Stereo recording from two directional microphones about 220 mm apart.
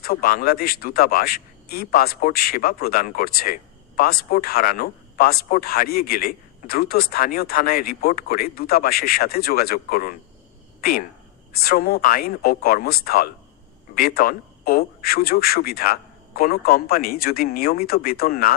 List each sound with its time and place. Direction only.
0.0 s speech: 45° left (ahead or behind)
11.5 s speech: 45° left (ahead or behind)